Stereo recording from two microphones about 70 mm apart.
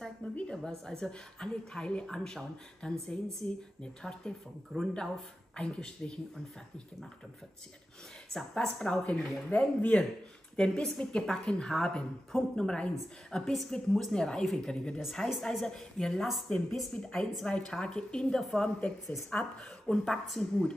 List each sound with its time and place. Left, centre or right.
0.2 s speech: left
0.7 s a woman's voice: centre
8.3 s a woman's voice: centre
9.5 s speech: left
10.5 s a woman's voice: centre
15.0 s a woman's voice: centre
15.4 s a woman's voice: centre
16.9 s a woman's voice: centre